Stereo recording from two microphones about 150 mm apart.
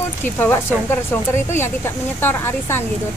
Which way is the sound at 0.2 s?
15° left (ahead or behind).